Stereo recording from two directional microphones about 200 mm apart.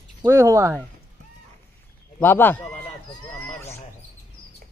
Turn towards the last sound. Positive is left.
turn(degrees=10)  # may be behind; listen again after turning